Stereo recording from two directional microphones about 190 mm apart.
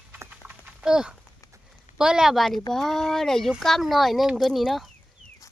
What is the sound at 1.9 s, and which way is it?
Speech, 5° right (ahead or behind).